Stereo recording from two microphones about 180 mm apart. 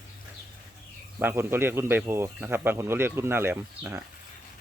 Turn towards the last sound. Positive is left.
turn(degrees=-15)  # may be behind; listen again after turning